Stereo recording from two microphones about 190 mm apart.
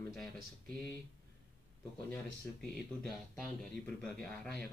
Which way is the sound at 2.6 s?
Centre (ahead or behind).